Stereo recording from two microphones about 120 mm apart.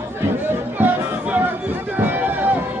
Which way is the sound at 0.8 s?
15° right (ahead or behind).